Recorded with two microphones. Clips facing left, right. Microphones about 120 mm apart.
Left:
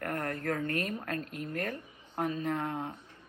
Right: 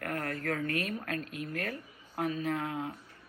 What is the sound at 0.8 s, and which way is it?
Speech, 25° left (ahead or behind).